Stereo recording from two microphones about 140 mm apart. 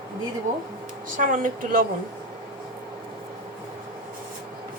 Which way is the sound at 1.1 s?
70° right (ahead or behind).